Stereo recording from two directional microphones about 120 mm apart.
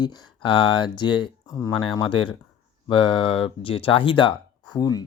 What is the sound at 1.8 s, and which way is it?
Speech, 45° left (ahead or behind).